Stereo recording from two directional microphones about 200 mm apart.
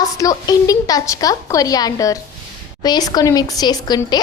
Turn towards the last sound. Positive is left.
turn(degrees=20)  # may be behind; listen again after turning